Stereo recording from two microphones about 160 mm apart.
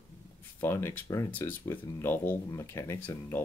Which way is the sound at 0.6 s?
15° left (ahead or behind).